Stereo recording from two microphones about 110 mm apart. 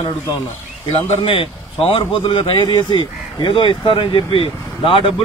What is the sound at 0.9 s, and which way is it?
A man's voice, 55° left (ahead or behind).